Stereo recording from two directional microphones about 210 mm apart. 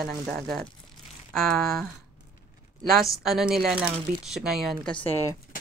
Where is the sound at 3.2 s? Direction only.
Centre (ahead or behind).